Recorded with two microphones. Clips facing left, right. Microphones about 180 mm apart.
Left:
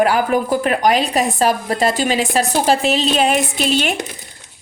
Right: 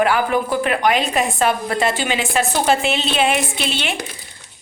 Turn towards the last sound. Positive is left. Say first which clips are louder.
# left 6 dB
turn(degrees=40)  # may be behind; listen again after turning